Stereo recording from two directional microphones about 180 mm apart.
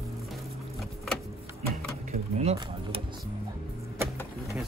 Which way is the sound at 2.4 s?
35° right (ahead or behind).